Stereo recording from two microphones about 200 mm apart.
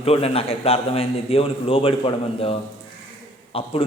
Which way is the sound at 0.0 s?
30° left (ahead or behind).